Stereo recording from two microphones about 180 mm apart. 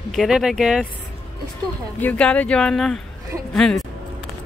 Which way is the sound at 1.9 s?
10° left (ahead or behind).